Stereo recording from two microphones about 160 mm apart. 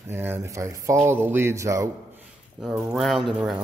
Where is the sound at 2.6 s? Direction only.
5° right (ahead or behind).